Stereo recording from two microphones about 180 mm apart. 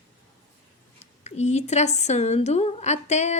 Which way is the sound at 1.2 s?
40° left (ahead or behind).